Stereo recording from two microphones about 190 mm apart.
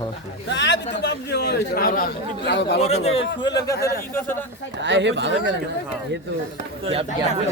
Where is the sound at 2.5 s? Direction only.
65° left (ahead or behind).